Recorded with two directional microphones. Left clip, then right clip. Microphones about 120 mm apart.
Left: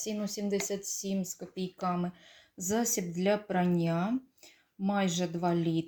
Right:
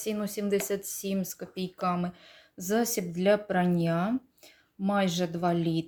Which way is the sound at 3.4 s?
10° right (ahead or behind).